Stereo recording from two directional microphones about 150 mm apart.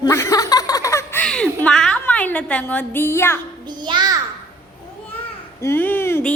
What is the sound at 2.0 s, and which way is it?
A woman's voice, 10° left (ahead or behind).